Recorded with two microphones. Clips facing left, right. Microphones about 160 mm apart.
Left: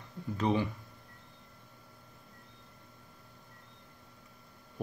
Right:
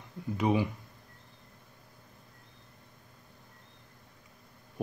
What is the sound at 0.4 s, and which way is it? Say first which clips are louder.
Speech: right 2 dB; 10° right (ahead or behind).